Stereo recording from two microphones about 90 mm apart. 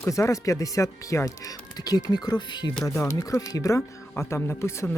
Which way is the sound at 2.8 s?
35° left (ahead or behind).